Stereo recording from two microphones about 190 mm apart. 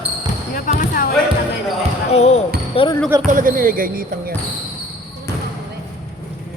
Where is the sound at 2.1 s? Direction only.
35° left (ahead or behind).